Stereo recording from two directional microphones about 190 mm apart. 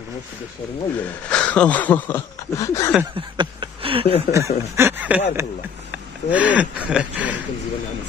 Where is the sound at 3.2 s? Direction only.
25° right (ahead or behind).